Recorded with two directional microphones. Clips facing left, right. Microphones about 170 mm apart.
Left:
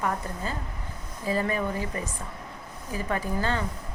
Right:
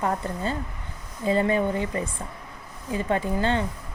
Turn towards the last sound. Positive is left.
turn(degrees=-25)  # may be behind; listen again after turning